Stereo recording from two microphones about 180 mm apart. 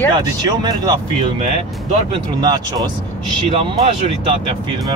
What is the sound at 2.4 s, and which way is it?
Speech, 20° right (ahead or behind).